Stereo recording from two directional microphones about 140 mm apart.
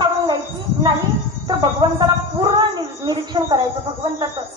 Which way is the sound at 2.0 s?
30° right (ahead or behind).